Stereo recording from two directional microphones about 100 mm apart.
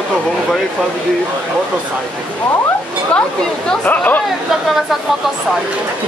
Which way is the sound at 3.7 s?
15° left (ahead or behind).